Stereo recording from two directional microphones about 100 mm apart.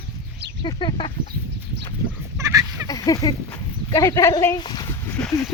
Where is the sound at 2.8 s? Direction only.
40° left (ahead or behind).